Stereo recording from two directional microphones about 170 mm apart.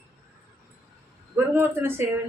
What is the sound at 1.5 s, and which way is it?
Speech, 15° right (ahead or behind).